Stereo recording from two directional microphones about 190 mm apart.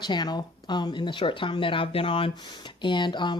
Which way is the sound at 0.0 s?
20° left (ahead or behind).